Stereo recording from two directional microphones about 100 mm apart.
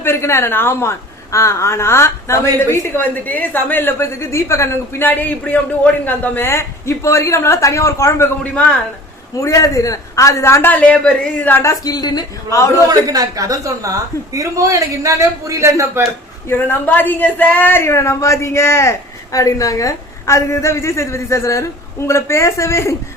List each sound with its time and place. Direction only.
0.0 s a woman's voice: 25° left (ahead or behind)
9.4 s a woman's voice: 35° left (ahead or behind); by 11.6 s 15° left (ahead or behind)
11.6 s a woman's voice: 40° left (ahead or behind)
12.9 s a woman's voice: 40° right (ahead or behind)
16.5 s a woman's voice: 20° left (ahead or behind)